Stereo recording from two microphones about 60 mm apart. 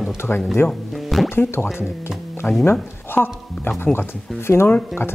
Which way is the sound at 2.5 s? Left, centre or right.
Left.